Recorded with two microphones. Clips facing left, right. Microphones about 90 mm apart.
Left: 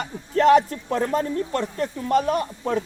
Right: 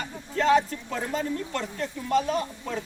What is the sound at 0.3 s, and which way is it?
Speech, 60° left (ahead or behind).